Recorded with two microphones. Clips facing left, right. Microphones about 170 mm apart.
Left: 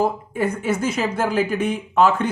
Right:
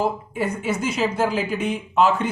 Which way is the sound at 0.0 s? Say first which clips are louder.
Left 2 dB; 50° left (ahead or behind).